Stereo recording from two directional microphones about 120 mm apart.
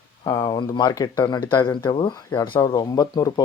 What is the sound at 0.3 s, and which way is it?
Speech, 35° left (ahead or behind).